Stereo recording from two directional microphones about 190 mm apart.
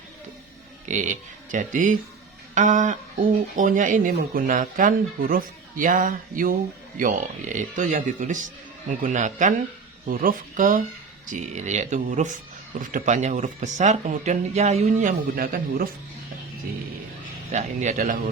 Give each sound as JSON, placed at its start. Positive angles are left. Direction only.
{"t": 0.9, "sound": "speech", "side_deg": -40}
{"t": 17.5, "sound": "speech", "side_deg": -40}